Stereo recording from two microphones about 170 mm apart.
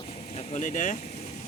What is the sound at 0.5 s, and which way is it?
Speech, 50° left (ahead or behind).